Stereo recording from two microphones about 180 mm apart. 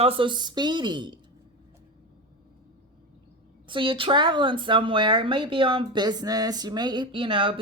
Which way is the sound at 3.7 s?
30° right (ahead or behind).